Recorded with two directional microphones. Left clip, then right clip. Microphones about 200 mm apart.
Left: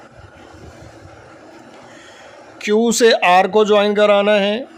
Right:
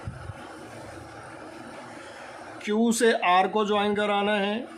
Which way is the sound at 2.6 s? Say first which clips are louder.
Left 10 dB; 45° left (ahead or behind).